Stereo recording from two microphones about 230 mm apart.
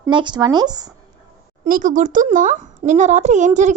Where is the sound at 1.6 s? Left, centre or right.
Right.